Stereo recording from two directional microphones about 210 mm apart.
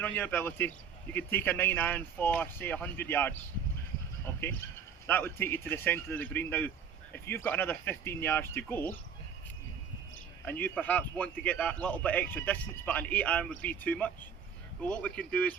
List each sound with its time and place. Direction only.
0.2 s a man's voice: 10° left (ahead or behind)
10.4 s a man's voice: 10° left (ahead or behind)